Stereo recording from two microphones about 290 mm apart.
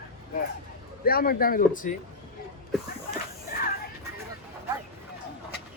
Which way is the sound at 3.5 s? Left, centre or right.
Left.